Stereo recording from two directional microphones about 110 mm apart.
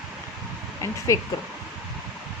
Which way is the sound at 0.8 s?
30° left (ahead or behind).